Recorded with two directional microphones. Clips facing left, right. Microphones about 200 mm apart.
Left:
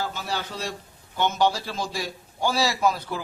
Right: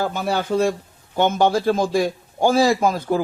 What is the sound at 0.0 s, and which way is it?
A man's voice, 55° right (ahead or behind).